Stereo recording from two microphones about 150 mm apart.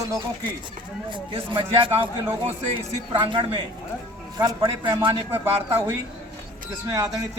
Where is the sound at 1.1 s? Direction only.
30° right (ahead or behind).